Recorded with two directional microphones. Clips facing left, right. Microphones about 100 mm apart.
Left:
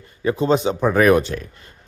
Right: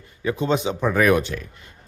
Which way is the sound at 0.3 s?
35° left (ahead or behind).